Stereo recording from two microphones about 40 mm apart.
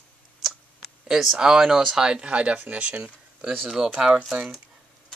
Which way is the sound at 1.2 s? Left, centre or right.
Centre.